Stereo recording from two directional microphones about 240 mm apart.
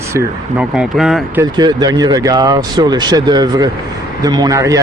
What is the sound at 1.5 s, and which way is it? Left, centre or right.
Speech, centre.